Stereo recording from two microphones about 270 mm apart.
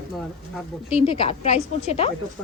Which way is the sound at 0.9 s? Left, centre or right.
Left.